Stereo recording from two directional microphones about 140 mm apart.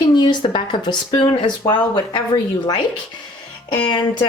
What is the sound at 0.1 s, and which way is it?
Speech, 30° left (ahead or behind).